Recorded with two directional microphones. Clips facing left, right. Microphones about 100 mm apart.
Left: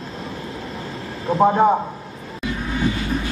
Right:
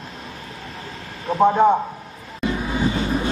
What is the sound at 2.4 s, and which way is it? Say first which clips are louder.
Vehicle: right 1 dB; 25° right (ahead or behind).